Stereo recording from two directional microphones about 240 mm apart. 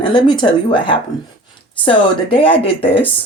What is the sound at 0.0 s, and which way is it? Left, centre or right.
Speech, centre.